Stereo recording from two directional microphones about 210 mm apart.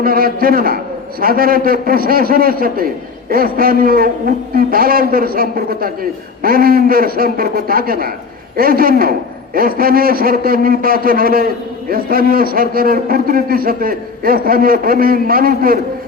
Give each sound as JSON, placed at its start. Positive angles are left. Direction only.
{"t": 0.0, "sound": "a man's voice", "side_deg": -45}